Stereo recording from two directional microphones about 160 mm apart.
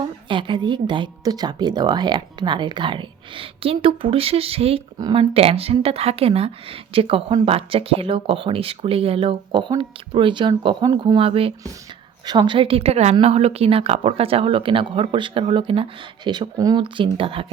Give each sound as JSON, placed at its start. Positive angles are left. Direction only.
{"t": 0.0, "sound": "a woman's voice", "side_deg": -30}
{"t": 4.9, "sound": "speech", "side_deg": -25}
{"t": 5.3, "sound": "a woman's voice", "side_deg": -40}
{"t": 12.2, "sound": "a woman's voice", "side_deg": -25}